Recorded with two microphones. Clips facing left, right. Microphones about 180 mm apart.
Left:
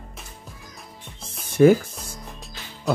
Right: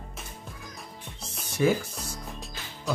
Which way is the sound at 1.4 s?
50° left (ahead or behind).